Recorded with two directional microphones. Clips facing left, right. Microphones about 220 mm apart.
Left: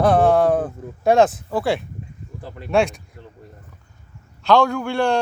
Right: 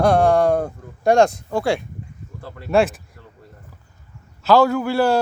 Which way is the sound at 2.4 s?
20° left (ahead or behind).